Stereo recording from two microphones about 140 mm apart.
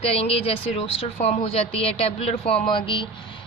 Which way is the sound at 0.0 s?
45° left (ahead or behind).